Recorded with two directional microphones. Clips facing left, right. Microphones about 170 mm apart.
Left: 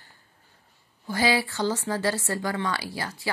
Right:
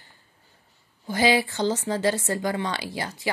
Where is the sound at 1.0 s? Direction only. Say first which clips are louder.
Right 3 dB; 20° right (ahead or behind).